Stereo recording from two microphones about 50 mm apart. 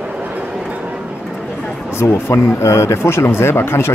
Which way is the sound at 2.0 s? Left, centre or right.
Left.